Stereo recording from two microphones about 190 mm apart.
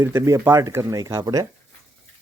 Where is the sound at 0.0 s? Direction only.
15° right (ahead or behind).